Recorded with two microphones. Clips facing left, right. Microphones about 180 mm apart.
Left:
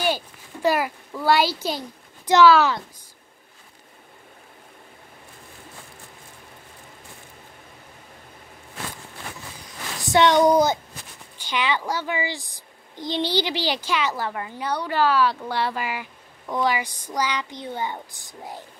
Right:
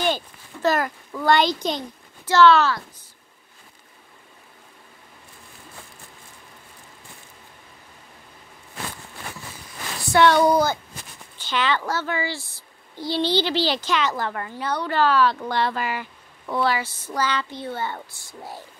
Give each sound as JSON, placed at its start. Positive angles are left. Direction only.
{"t": 0.0, "sound": "a child's voice", "side_deg": 10}
{"t": 10.1, "sound": "a woman's voice", "side_deg": 15}